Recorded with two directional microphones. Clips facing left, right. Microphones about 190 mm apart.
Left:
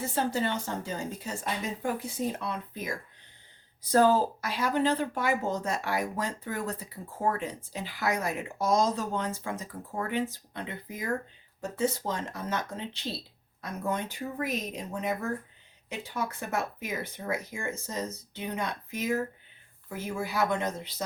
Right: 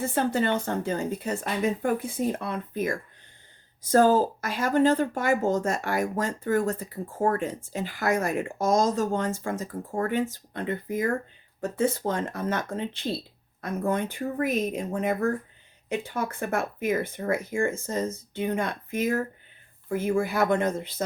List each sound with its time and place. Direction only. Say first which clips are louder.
0.0 s speech: right 4 dB; 55° right (ahead or behind)